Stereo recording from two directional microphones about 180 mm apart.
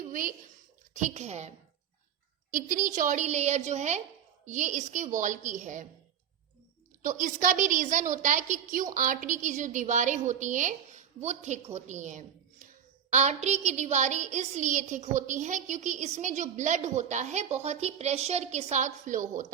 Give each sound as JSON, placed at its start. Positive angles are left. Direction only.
{"t": 0.0, "sound": "a sound", "side_deg": -45}
{"t": 0.9, "sound": "a woman's voice", "side_deg": -40}
{"t": 7.0, "sound": "a woman's voice", "side_deg": -45}